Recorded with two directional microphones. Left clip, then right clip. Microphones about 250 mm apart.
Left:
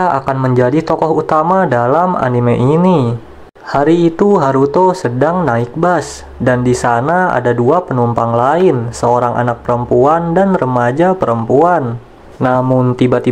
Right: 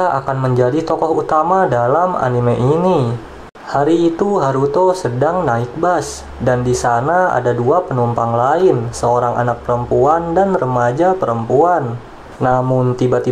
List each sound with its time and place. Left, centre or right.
0.0 s speech: left